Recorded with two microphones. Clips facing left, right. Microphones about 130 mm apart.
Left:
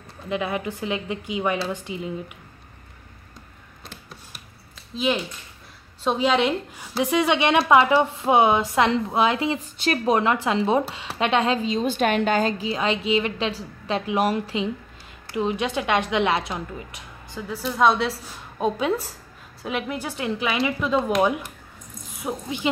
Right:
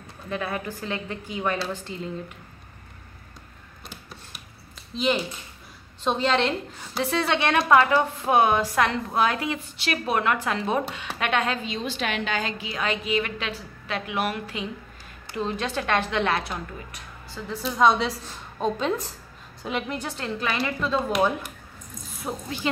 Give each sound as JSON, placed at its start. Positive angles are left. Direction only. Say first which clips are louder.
{"t": 0.3, "sound": "a woman's voice", "louder": "left 3 dB", "side_deg": 15}
{"t": 3.8, "sound": "a sound", "louder": "even", "side_deg": 0}
{"t": 4.9, "sound": "a woman's voice", "louder": "even", "side_deg": 0}
{"t": 11.8, "sound": "a woman's voice", "louder": "left 7 dB", "side_deg": 50}
{"t": 15.3, "sound": "a woman's voice", "louder": "left 4 dB", "side_deg": 15}
{"t": 17.6, "sound": "a woman's voice", "louder": "left 1 dB", "side_deg": 5}
{"t": 22.2, "sound": "a woman's voice", "louder": "left 3 dB", "side_deg": 15}